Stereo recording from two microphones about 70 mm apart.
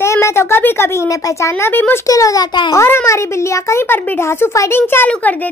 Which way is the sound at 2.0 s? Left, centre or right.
Left.